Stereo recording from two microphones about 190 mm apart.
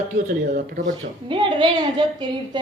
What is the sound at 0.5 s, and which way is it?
Speech, 50° right (ahead or behind).